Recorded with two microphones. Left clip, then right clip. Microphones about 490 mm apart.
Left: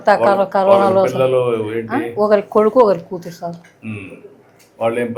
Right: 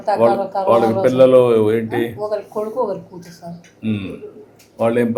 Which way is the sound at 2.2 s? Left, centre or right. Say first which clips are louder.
Left 9 dB; left.